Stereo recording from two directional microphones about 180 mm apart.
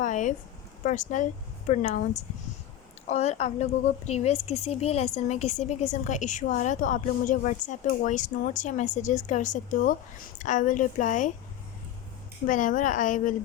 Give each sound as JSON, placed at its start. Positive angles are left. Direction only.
{"t": 0.0, "sound": "a woman's voice", "side_deg": 45}
{"t": 3.1, "sound": "a woman's voice", "side_deg": 35}
{"t": 12.5, "sound": "a woman's voice", "side_deg": 45}